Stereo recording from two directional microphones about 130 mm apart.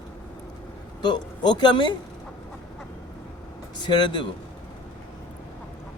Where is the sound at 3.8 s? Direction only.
35° left (ahead or behind).